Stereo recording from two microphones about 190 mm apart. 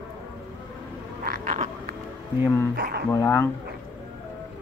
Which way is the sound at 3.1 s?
15° left (ahead or behind).